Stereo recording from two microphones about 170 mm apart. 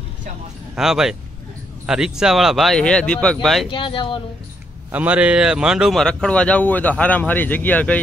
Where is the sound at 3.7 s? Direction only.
30° left (ahead or behind).